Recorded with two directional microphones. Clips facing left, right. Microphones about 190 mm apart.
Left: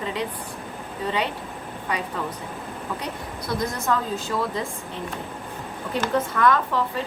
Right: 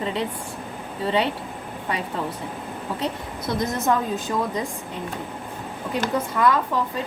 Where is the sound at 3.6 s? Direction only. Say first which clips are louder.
Right 3 dB; 20° right (ahead or behind).